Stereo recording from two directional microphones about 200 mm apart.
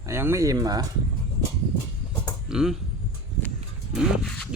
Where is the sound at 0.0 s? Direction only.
15° right (ahead or behind).